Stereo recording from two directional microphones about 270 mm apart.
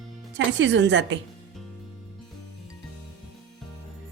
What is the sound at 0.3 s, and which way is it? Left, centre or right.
Speech, right.